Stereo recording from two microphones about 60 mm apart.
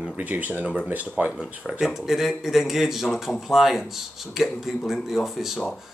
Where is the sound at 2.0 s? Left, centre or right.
Centre.